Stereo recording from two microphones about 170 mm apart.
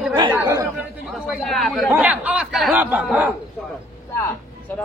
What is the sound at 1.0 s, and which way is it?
A man's voice, centre (ahead or behind).